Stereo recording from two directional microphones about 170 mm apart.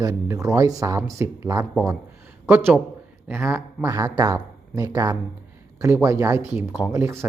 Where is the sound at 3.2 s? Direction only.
15° right (ahead or behind).